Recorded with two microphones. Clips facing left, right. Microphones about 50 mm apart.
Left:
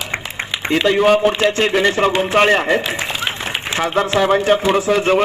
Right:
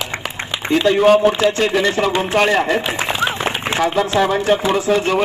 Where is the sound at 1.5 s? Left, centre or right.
Left.